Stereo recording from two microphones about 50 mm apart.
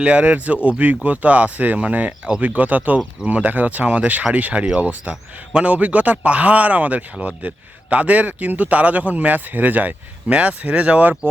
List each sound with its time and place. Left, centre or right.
0.0 s speech: right